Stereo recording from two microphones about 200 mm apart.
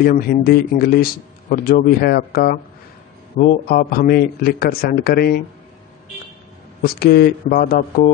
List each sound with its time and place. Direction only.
0.0 s speech: 45° left (ahead or behind)
6.8 s speech: 50° left (ahead or behind)